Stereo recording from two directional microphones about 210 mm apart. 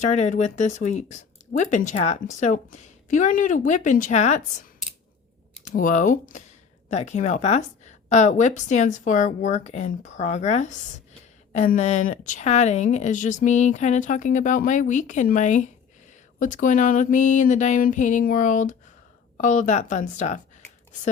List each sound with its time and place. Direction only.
0.0 s speech: 35° left (ahead or behind)
5.6 s speech: 35° left (ahead or behind)